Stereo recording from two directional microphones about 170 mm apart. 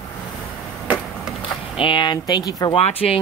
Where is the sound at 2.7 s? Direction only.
35° left (ahead or behind).